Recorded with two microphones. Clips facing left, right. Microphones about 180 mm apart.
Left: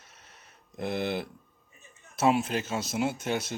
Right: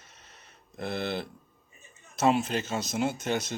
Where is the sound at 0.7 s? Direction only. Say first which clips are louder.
Left 2 dB; 15° left (ahead or behind).